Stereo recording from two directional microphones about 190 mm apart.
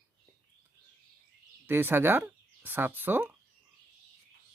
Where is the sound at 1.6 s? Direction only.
10° right (ahead or behind).